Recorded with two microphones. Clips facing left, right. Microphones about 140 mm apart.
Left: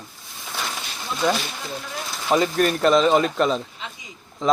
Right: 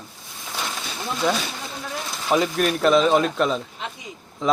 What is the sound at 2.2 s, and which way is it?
Speech, centre (ahead or behind).